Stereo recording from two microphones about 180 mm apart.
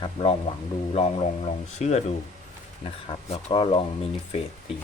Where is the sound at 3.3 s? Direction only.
30° left (ahead or behind).